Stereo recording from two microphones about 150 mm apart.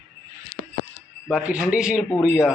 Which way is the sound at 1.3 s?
10° right (ahead or behind).